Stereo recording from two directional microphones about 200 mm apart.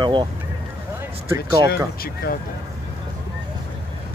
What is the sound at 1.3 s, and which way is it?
Speech, 15° right (ahead or behind).